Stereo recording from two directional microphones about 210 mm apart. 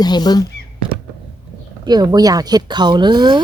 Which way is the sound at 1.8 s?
20° right (ahead or behind).